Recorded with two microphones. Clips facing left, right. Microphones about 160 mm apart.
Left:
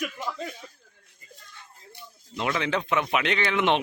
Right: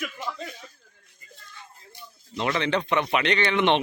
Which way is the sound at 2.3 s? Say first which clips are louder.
Right 2 dB; 5° left (ahead or behind).